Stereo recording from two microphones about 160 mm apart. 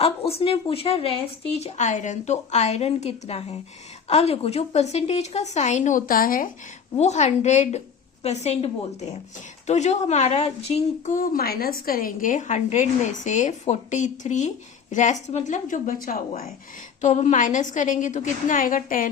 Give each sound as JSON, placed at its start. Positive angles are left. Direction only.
{"t": 0.0, "sound": "speech", "side_deg": 40}
{"t": 6.9, "sound": "a woman's voice", "side_deg": 45}
{"t": 17.0, "sound": "speech", "side_deg": 45}